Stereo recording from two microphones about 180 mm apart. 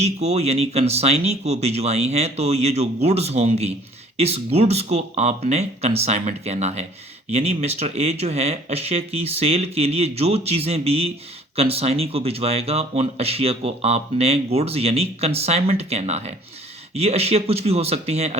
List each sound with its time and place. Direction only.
0.0 s speech: 35° right (ahead or behind)